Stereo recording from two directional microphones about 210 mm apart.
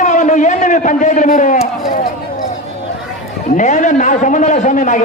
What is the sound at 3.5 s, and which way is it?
A man's voice, 35° left (ahead or behind).